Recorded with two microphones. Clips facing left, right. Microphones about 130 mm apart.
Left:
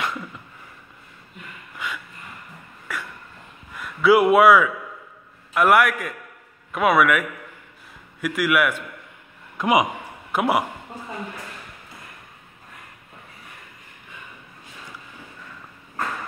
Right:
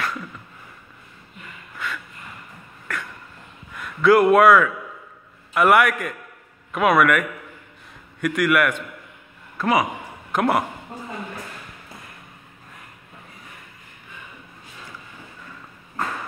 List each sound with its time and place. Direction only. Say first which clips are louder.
1.8 s a sound: right 1 dB; 15° left (ahead or behind)
3.7 s a man's voice: right 1 dB; 5° left (ahead or behind)
9.6 s a man's voice: left 1 dB; 15° left (ahead or behind)